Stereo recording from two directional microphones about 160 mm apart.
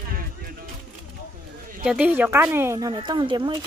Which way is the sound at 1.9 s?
10° right (ahead or behind).